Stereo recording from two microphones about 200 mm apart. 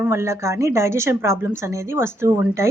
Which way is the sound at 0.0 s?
15° right (ahead or behind).